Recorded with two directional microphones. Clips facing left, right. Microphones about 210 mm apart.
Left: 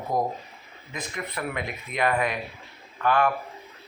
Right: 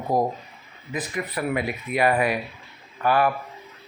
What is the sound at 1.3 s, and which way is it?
Speech, 5° right (ahead or behind).